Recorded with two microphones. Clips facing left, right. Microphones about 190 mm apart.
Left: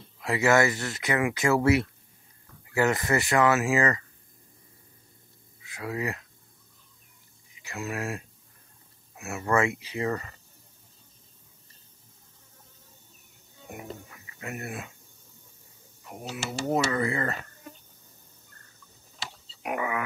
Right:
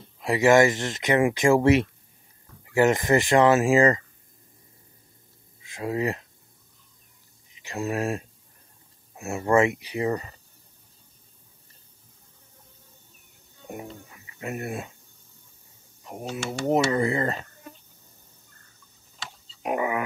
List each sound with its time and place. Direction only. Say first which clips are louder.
0.2 s speech: right 5 dB; 15° right (ahead or behind)
5.6 s speech: right 5 dB; 25° right (ahead or behind)
7.5 s speech: right 6 dB; 25° right (ahead or behind)
13.7 s speech: right 2 dB; 30° right (ahead or behind)
16.0 s speech: right 4 dB; 25° right (ahead or behind)
19.6 s speech: right 4 dB; 25° right (ahead or behind)